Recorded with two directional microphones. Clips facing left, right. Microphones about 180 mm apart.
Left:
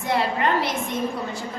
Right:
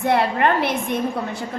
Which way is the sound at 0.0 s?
60° right (ahead or behind).